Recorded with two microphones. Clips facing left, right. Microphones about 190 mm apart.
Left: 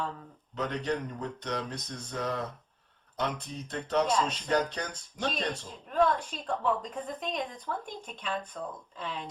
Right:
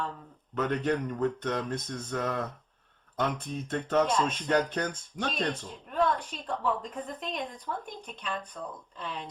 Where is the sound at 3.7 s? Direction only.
50° right (ahead or behind).